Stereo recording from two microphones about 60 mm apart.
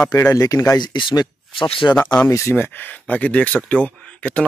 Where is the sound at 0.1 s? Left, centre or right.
Left.